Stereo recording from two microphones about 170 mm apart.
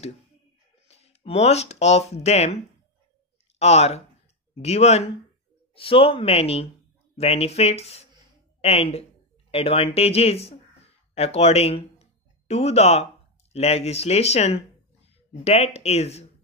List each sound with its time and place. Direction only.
0.8 s speech: 40° left (ahead or behind)